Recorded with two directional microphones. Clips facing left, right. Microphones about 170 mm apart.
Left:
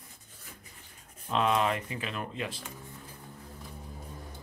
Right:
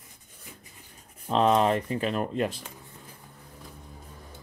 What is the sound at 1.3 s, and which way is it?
Speech, 35° right (ahead or behind).